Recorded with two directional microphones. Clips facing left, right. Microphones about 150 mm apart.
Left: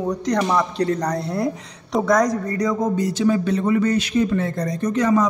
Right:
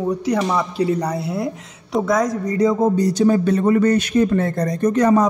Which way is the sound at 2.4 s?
20° right (ahead or behind).